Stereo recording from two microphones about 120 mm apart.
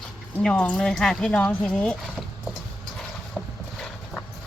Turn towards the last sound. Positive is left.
turn(degrees=5)  # may be behind; listen again after turning